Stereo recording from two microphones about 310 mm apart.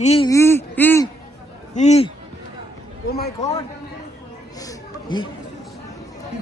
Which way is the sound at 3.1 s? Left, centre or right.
Left.